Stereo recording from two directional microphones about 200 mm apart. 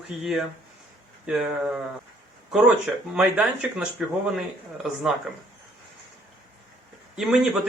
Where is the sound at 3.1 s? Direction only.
5° right (ahead or behind).